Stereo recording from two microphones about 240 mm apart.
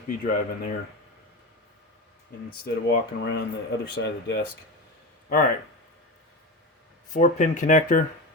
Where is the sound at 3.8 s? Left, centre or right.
Left.